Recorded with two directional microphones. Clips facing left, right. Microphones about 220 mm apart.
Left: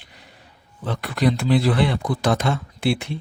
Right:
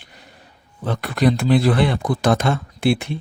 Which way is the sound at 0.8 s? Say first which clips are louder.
Right 3 dB; 50° right (ahead or behind).